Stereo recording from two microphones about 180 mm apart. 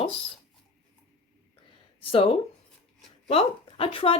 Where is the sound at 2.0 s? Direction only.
30° left (ahead or behind).